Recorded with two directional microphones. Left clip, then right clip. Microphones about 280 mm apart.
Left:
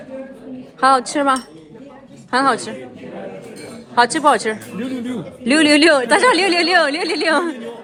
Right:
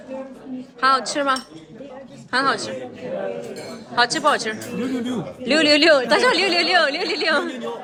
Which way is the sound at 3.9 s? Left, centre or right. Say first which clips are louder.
Left 4 dB; left.